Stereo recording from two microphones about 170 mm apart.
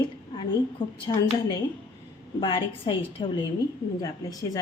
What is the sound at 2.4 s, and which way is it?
A woman's voice, 25° left (ahead or behind).